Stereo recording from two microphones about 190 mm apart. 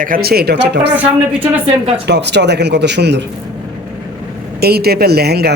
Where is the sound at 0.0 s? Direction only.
50° right (ahead or behind).